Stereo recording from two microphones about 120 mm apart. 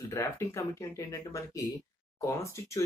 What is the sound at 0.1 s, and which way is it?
Speech, 25° left (ahead or behind).